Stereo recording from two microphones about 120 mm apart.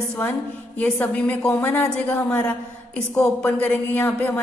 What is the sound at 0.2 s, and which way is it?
Speech, 15° left (ahead or behind).